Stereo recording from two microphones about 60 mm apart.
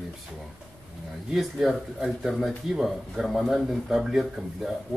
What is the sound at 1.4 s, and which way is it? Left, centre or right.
A man's voice, centre.